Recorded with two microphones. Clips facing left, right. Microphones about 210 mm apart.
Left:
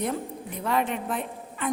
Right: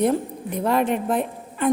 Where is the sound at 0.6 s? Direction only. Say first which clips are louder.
Right 5 dB; 40° right (ahead or behind).